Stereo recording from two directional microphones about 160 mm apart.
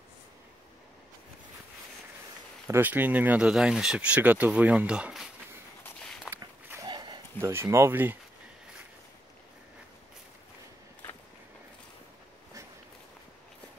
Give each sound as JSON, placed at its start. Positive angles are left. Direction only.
{"t": 2.7, "sound": "speech", "side_deg": -10}
{"t": 6.3, "sound": "walk", "side_deg": -20}
{"t": 7.3, "sound": "speech", "side_deg": -15}